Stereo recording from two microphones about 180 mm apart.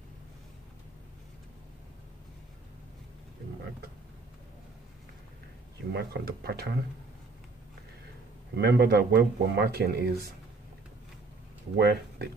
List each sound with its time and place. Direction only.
5.9 s speech: 60° right (ahead or behind)
8.5 s speech: 65° right (ahead or behind)
11.7 s speech: 65° right (ahead or behind)